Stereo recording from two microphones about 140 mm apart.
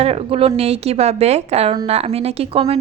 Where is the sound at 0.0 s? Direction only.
45° right (ahead or behind).